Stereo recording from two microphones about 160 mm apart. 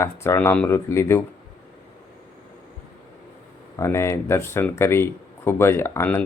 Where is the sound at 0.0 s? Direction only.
15° left (ahead or behind).